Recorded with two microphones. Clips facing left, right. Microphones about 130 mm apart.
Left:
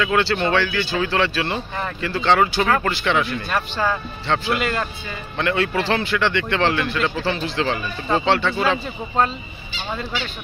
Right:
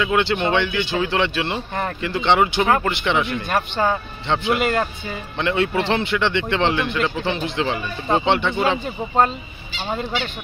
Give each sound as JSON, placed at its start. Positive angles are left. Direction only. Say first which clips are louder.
{"t": 0.0, "sound": "speech", "louder": "even", "side_deg": -20}